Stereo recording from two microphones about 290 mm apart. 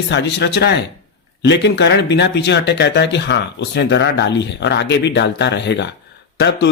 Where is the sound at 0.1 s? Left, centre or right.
Left.